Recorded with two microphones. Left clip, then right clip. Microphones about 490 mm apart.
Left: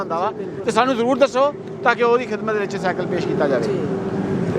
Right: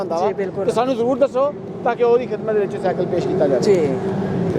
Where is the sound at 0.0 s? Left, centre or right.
Left.